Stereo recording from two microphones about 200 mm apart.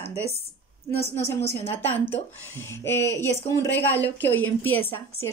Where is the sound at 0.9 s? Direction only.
30° left (ahead or behind).